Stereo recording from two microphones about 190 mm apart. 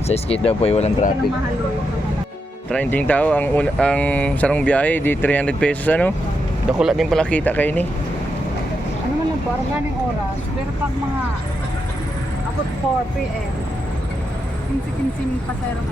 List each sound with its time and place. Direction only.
0.1 s speech: 30° left (ahead or behind)
2.7 s speech: 10° left (ahead or behind)
6.7 s speech: 5° right (ahead or behind)